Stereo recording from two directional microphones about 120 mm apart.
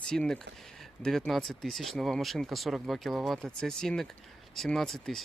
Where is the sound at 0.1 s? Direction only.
5° left (ahead or behind).